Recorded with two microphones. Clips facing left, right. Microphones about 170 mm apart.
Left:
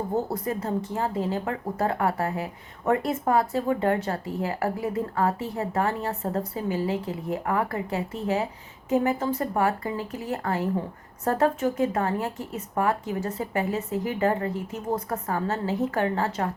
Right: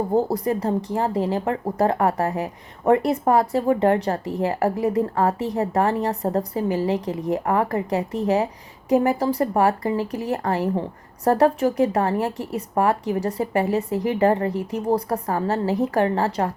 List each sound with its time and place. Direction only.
0.1 s speech: 35° right (ahead or behind)